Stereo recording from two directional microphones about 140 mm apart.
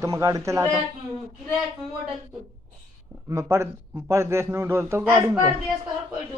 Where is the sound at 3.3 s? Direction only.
20° right (ahead or behind).